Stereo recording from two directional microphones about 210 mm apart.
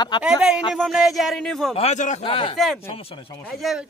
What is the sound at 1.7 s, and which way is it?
Speech, 30° left (ahead or behind).